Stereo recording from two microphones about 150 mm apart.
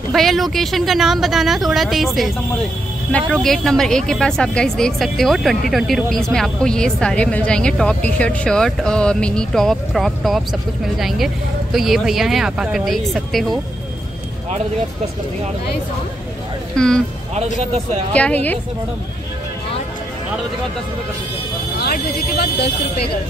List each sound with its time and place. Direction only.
0.1 s speech: centre (ahead or behind)
16.7 s speech: 5° left (ahead or behind)
17.6 s speech: 45° right (ahead or behind)
18.1 s a woman's voice: 10° left (ahead or behind)
21.7 s speech: 90° left